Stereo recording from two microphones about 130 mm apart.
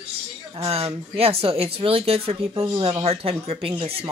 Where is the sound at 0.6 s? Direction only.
50° right (ahead or behind).